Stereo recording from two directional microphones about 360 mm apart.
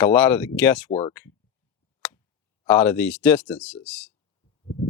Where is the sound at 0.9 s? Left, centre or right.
Centre.